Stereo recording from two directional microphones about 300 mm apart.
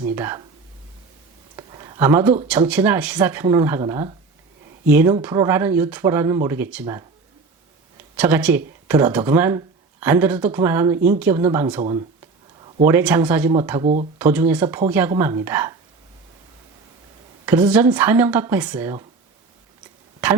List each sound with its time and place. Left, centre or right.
0.0 s speech: centre
1.5 s a sound: centre
2.5 s speech: centre
12.9 s speech: centre
13.8 s speech: right
14.2 s speech: centre
17.4 s speech: centre